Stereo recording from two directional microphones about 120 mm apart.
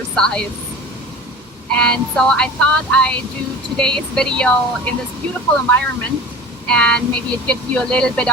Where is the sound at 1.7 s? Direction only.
10° left (ahead or behind).